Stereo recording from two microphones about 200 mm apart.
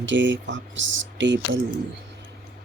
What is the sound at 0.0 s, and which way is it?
Speech, 65° right (ahead or behind).